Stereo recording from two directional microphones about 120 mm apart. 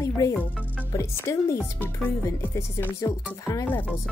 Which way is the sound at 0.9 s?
25° left (ahead or behind).